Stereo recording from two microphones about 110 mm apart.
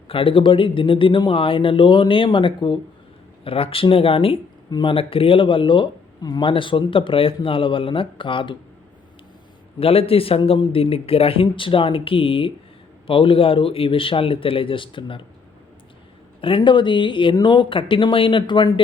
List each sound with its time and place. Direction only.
0.1 s a man's voice: 55° left (ahead or behind)
9.8 s a man's voice: 60° left (ahead or behind)
16.4 s speech: 50° left (ahead or behind)